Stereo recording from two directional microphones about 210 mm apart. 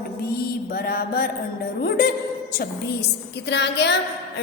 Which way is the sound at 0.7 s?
45° left (ahead or behind).